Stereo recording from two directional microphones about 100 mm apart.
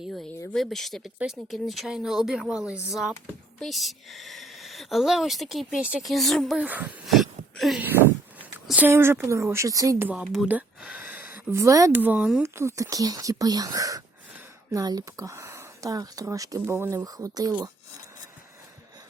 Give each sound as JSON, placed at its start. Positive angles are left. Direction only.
{"t": 0.0, "sound": "a sound", "side_deg": 0}
{"t": 0.5, "sound": "speech", "side_deg": 0}
{"t": 6.6, "sound": "speech", "side_deg": -15}
{"t": 7.1, "sound": "wail", "side_deg": 0}
{"t": 8.7, "sound": "a woman's voice", "side_deg": -20}
{"t": 10.0, "sound": "speech", "side_deg": -15}
{"t": 10.5, "sound": "a sound", "side_deg": -15}
{"t": 11.6, "sound": "speech", "side_deg": -35}
{"t": 11.9, "sound": "a woman's voice", "side_deg": -20}
{"t": 12.4, "sound": "speech", "side_deg": -25}
{"t": 16.6, "sound": "a woman's voice", "side_deg": -25}
{"t": 17.2, "sound": "speech", "side_deg": -35}